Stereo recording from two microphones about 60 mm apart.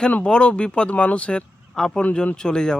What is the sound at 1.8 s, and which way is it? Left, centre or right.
Speech, centre.